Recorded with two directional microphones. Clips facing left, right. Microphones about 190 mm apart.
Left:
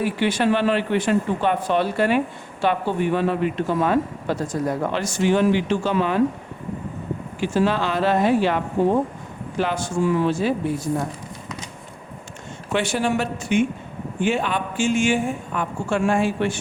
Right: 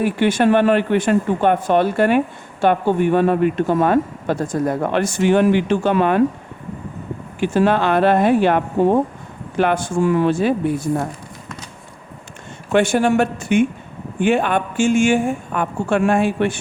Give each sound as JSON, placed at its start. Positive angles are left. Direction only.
{"t": 0.0, "sound": "speech", "side_deg": -50}
{"t": 7.3, "sound": "a woman's voice", "side_deg": -55}
{"t": 12.7, "sound": "a woman's voice", "side_deg": -50}